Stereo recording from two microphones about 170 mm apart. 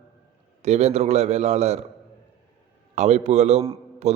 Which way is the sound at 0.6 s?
40° right (ahead or behind).